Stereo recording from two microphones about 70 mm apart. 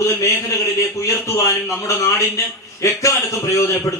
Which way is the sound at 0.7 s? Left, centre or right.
Left.